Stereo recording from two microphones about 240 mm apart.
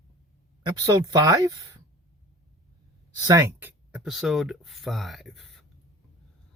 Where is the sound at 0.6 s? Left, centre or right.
Centre.